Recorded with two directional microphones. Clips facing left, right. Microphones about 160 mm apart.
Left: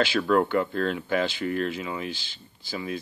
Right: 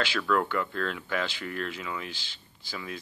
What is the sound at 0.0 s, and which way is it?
A man's voice, 35° left (ahead or behind).